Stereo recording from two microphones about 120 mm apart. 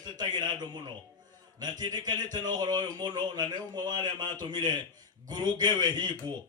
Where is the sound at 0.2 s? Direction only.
35° right (ahead or behind).